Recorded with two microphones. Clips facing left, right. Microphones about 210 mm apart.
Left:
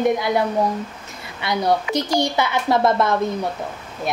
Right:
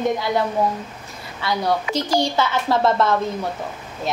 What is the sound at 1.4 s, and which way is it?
A woman's voice, 20° left (ahead or behind).